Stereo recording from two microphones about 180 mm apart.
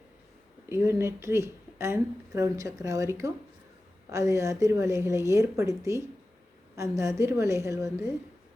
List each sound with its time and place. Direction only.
0.7 s speech: 15° right (ahead or behind)